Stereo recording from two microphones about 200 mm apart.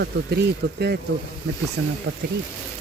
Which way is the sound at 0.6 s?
50° right (ahead or behind).